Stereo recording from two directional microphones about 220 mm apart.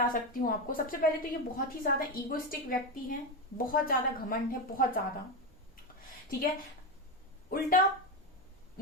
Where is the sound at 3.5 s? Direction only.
40° left (ahead or behind).